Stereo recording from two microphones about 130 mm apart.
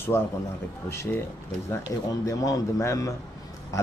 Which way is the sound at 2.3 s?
25° left (ahead or behind).